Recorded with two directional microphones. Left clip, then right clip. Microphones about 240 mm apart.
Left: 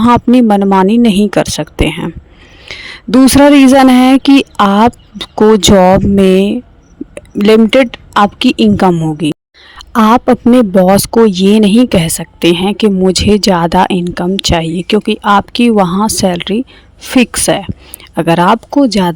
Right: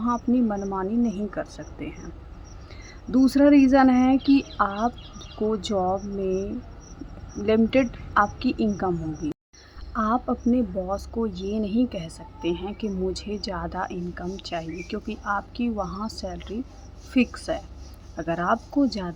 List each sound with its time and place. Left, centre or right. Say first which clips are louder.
0.0 s a woman's voice: left 17 dB; left